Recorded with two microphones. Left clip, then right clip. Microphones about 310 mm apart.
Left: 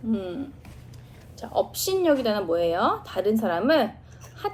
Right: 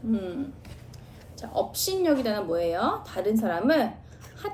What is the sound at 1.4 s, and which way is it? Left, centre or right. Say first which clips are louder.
Speech: left 2 dB; centre.